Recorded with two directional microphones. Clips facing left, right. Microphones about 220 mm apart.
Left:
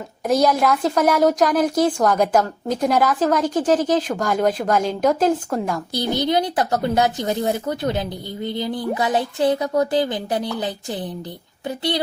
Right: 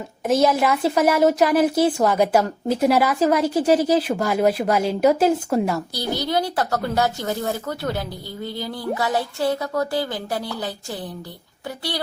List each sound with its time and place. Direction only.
0.3 s a woman's voice: centre (ahead or behind)
5.9 s a woman's voice: 20° left (ahead or behind)